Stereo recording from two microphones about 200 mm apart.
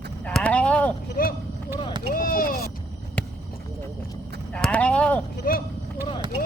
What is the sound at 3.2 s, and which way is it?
Clip-clop, 5° left (ahead or behind).